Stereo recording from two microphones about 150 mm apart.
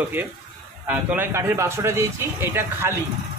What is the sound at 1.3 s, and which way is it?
Speech, 20° right (ahead or behind).